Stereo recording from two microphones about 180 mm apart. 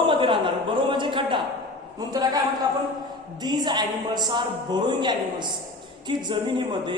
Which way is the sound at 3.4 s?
25° right (ahead or behind).